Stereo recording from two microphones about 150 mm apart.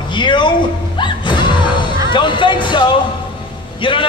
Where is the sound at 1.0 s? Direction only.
30° left (ahead or behind).